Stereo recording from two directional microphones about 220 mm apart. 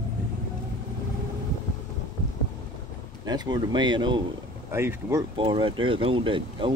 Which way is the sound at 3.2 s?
20° right (ahead or behind).